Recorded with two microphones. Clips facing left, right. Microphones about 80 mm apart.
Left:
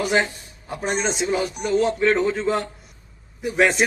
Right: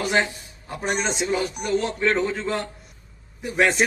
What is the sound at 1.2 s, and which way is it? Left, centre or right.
Speech, centre.